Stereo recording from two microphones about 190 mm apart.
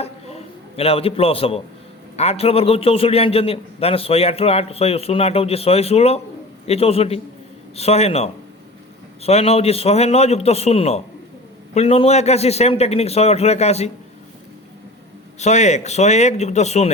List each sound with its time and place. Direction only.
0.8 s a man's voice: 30° left (ahead or behind)
15.4 s a man's voice: 35° left (ahead or behind)